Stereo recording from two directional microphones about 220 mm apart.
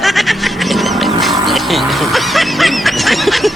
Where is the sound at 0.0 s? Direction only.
Centre (ahead or behind).